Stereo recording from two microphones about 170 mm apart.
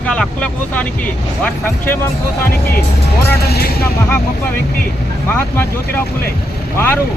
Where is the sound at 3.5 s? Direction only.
65° left (ahead or behind).